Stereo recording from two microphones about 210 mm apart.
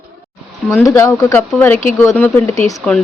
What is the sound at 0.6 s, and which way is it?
Speech, 10° left (ahead or behind).